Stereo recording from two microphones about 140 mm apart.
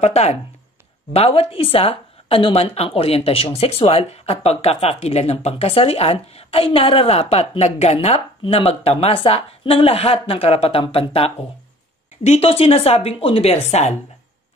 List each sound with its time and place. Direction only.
0.0 s speech: 50° left (ahead or behind)